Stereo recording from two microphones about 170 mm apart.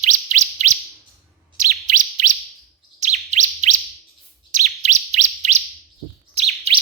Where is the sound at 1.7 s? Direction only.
50° right (ahead or behind).